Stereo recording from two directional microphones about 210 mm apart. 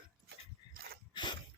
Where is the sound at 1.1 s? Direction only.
20° left (ahead or behind).